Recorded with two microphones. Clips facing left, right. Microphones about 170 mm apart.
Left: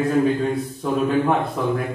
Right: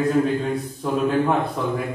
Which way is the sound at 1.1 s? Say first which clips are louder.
Right 1 dB; centre (ahead or behind).